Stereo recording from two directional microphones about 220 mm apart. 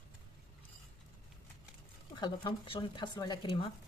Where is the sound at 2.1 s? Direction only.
20° left (ahead or behind).